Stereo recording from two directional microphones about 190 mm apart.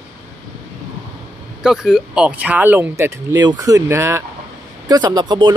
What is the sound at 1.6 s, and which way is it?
Speech, 5° right (ahead or behind).